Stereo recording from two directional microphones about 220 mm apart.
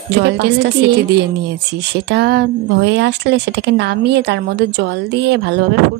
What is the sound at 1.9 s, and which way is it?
Speech, 50° right (ahead or behind).